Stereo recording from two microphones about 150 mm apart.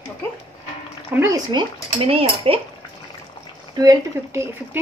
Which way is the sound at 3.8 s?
20° right (ahead or behind).